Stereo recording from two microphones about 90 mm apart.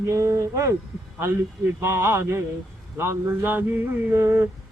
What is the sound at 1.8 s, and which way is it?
Mantra, 30° right (ahead or behind).